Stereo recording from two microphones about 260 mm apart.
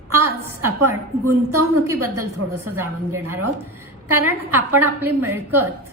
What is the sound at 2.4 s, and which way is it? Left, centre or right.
Speech, right.